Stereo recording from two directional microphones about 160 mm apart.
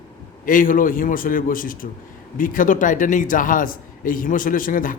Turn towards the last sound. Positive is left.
turn(degrees=60)  # may be behind; listen again after turning